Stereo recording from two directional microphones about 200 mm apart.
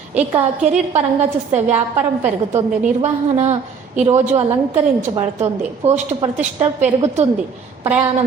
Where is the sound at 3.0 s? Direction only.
35° right (ahead or behind).